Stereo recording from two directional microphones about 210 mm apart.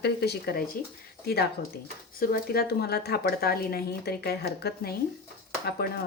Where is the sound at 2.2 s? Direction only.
45° left (ahead or behind).